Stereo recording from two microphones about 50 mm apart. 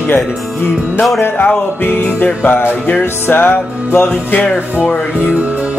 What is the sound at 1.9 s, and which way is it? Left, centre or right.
Music, left.